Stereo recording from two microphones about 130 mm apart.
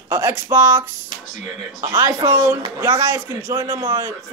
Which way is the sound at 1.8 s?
25° right (ahead or behind).